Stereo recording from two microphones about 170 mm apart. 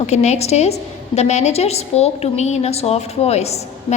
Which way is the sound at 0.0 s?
40° left (ahead or behind).